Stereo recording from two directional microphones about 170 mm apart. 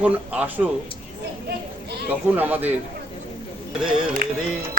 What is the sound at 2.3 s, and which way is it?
Speech, 10° right (ahead or behind).